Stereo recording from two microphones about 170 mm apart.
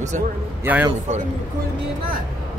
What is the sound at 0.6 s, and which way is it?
Speech, 10° right (ahead or behind).